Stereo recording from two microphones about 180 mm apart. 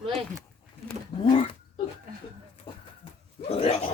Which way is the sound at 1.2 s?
35° left (ahead or behind).